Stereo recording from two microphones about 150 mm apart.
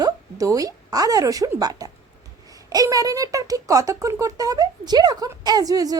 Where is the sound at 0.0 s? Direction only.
25° right (ahead or behind).